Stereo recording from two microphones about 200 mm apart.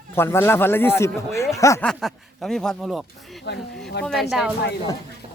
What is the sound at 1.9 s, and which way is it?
Speech, centre (ahead or behind).